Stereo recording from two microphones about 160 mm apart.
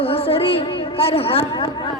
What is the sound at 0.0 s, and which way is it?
A woman's voice, 35° left (ahead or behind).